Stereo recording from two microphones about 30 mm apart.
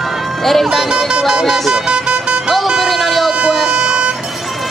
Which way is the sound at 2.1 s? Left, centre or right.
Right.